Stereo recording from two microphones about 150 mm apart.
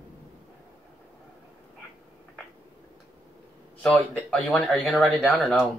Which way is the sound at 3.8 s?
5° left (ahead or behind).